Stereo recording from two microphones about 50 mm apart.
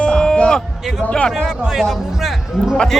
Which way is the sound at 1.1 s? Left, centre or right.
Left.